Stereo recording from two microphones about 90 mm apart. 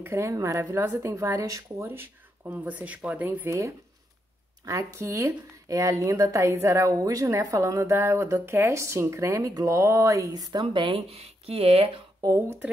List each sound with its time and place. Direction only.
0.0 s speech: 30° right (ahead or behind)
3.4 s speech: 35° right (ahead or behind); by 12.0 s 85° right